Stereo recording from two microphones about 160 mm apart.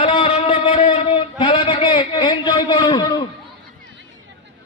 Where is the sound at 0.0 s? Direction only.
40° left (ahead or behind).